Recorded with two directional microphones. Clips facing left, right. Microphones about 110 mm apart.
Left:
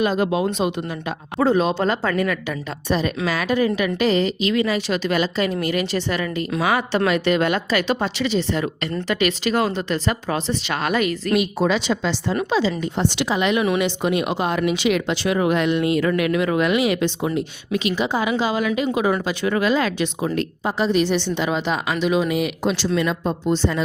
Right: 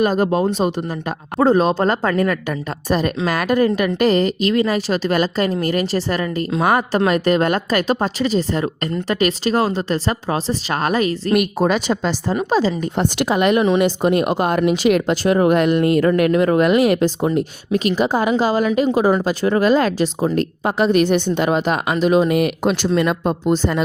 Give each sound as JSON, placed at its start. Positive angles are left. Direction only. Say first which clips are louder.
{"t": 0.0, "sound": "a woman's voice", "louder": "right 3 dB", "side_deg": -45}
{"t": 11.3, "sound": "a woman's voice", "louder": "right 3 dB", "side_deg": -50}
{"t": 20.7, "sound": "a woman's voice", "louder": "right 4 dB", "side_deg": -60}